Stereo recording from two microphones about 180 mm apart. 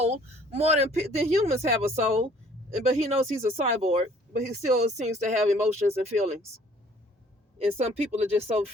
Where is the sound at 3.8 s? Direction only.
40° right (ahead or behind).